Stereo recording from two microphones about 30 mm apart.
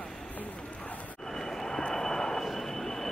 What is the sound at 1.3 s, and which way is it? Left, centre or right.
Vehicle, centre.